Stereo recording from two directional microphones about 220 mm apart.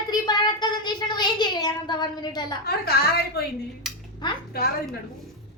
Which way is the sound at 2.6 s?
45° left (ahead or behind).